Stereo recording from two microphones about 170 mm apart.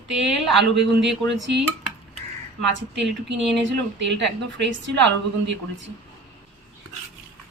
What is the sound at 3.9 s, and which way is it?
A woman's voice, 90° right.